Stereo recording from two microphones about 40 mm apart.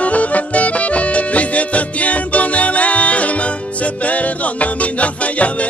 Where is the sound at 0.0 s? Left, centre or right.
Left.